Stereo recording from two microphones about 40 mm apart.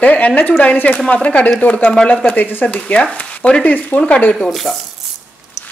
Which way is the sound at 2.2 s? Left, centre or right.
Left.